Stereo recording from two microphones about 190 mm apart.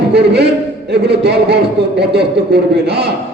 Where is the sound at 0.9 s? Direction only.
60° right (ahead or behind).